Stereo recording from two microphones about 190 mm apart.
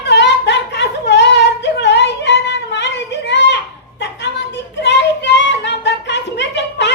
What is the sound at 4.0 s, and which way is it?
Child singing, 65° left (ahead or behind).